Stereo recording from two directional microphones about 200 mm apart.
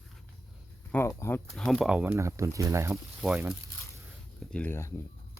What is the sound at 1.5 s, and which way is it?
Speech, centre (ahead or behind).